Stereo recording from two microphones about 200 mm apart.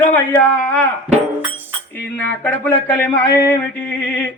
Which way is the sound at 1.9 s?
10° left (ahead or behind).